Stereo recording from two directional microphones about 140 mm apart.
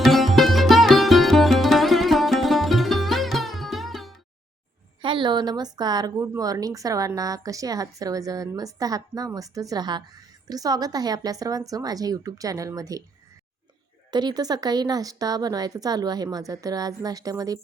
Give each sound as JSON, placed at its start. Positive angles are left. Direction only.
{"t": 0.0, "sound": "music", "side_deg": 0}
{"t": 5.0, "sound": "a woman's voice", "side_deg": -35}
{"t": 14.1, "sound": "a woman's voice", "side_deg": -30}